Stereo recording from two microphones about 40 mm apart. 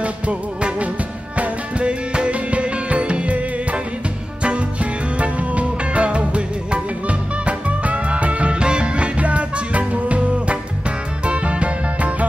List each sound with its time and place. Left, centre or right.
0.0 s music: right
5.2 s music: right